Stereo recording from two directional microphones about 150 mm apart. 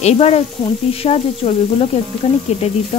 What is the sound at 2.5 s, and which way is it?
Stir, 50° left (ahead or behind).